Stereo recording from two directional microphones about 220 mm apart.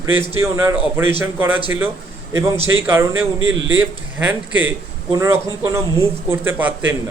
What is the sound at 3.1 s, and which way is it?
Speech, 60° right (ahead or behind).